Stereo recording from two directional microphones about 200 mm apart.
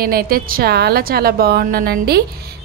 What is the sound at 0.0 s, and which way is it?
A woman's voice, 50° right (ahead or behind).